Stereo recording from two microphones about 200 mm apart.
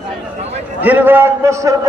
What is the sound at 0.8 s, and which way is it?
Speech, 10° right (ahead or behind).